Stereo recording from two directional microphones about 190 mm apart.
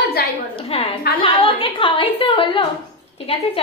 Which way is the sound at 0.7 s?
30° left (ahead or behind).